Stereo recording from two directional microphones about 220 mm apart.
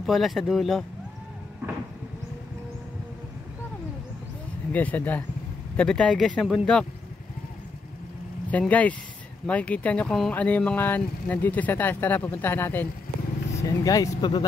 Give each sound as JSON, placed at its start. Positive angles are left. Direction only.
{"t": 0.0, "sound": "speech", "side_deg": 0}
{"t": 4.7, "sound": "speech", "side_deg": 5}
{"t": 8.5, "sound": "speech", "side_deg": 5}